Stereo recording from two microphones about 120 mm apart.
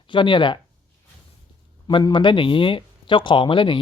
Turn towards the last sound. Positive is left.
turn(degrees=45)  # may be behind; listen again after turning